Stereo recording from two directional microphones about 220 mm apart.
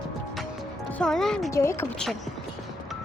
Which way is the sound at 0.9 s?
5° left (ahead or behind).